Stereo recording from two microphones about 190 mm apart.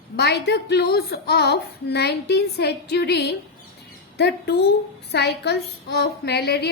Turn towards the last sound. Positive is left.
turn(degrees=60)  # may be behind; listen again after turning